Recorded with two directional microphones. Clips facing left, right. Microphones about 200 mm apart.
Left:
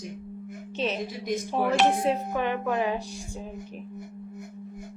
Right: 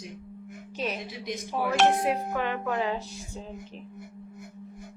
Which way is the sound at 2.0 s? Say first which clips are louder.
Left 2 dB; 20° left (ahead or behind).